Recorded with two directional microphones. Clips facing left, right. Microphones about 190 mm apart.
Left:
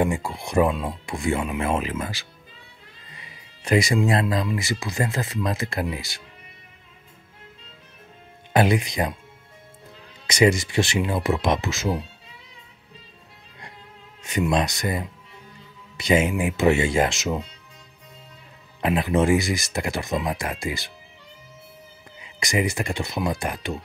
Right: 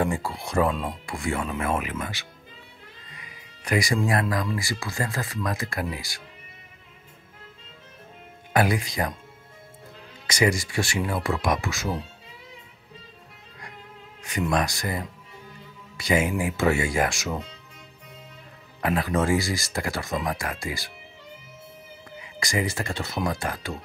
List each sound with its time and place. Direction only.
0.0 s speech: 15° left (ahead or behind); by 2.2 s 30° left (ahead or behind)
3.2 s music: 25° left (ahead or behind)
4.6 s speech: 20° left (ahead or behind)
8.5 s speech: 20° left (ahead or behind)
10.2 s speech: 20° left (ahead or behind)
14.5 s speech: 20° left (ahead or behind)
18.8 s speech: 20° left (ahead or behind)
22.2 s speech: 20° left (ahead or behind)